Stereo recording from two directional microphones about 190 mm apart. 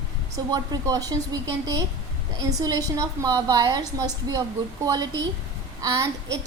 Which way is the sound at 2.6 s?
20° right (ahead or behind).